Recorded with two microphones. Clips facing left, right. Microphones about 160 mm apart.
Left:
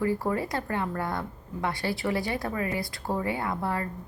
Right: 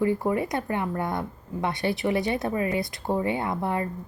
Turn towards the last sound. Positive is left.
turn(degrees=-20)  # may be behind; listen again after turning